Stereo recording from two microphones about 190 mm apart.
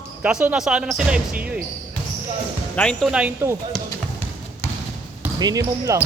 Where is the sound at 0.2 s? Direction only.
5° right (ahead or behind).